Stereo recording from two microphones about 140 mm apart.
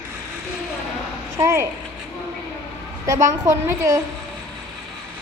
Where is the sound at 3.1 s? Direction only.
25° right (ahead or behind).